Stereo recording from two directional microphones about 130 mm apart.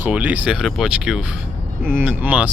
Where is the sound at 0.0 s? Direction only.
10° right (ahead or behind).